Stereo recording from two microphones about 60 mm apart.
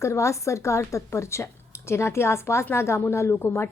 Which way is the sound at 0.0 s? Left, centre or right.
Left.